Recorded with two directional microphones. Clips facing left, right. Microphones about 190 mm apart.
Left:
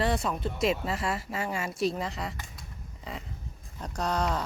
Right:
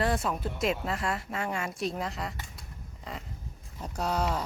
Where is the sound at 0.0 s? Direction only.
Centre (ahead or behind).